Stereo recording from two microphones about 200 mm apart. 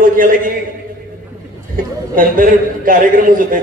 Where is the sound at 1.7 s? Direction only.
45° right (ahead or behind).